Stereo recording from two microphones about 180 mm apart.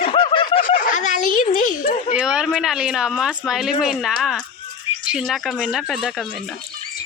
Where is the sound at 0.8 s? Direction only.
45° left (ahead or behind).